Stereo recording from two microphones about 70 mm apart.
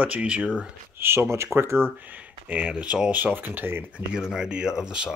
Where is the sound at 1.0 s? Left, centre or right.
Right.